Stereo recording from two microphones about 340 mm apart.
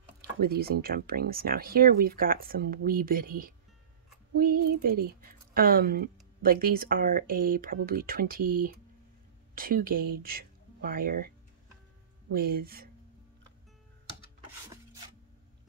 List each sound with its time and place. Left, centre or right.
0.4 s speech: right